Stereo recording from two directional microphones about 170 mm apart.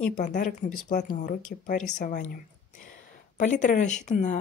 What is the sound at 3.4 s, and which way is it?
Speech, 45° left (ahead or behind).